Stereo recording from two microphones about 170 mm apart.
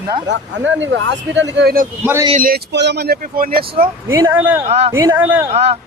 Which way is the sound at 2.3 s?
55° right (ahead or behind).